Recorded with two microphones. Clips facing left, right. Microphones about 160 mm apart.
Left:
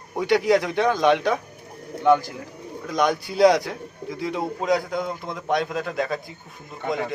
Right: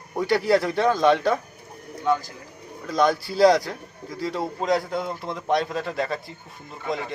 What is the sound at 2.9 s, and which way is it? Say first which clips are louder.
Speech: right 1 dB; 15° left (ahead or behind).